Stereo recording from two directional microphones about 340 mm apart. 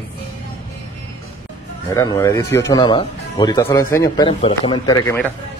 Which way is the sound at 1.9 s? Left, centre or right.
Centre.